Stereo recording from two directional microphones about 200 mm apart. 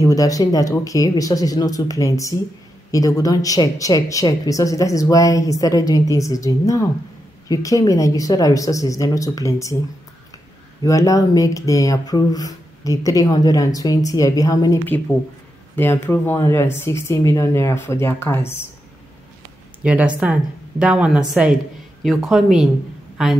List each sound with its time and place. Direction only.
0.0 s speech: 15° left (ahead or behind)
10.8 s speech: 15° left (ahead or behind)
19.8 s speech: 5° right (ahead or behind)